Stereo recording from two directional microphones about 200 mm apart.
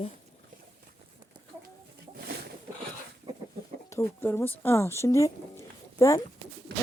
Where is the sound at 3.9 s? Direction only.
10° left (ahead or behind).